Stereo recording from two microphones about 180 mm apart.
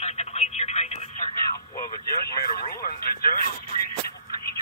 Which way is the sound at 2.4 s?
55° left (ahead or behind).